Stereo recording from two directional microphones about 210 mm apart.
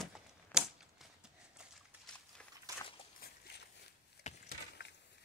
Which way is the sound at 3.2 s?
50° left (ahead or behind).